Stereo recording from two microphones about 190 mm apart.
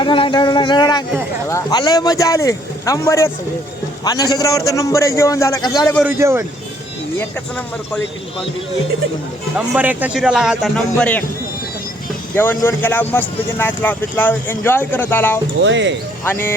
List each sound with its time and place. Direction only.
0.0 s speech: 25° left (ahead or behind)
6.1 s speech: 15° right (ahead or behind)
9.6 s a man's voice: 10° right (ahead or behind)
12.4 s speech: 10° left (ahead or behind)
15.6 s speech: 70° right (ahead or behind)
16.2 s speech: 10° left (ahead or behind)